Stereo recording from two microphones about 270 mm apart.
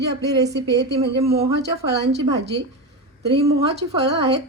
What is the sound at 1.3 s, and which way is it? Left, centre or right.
Speech, right.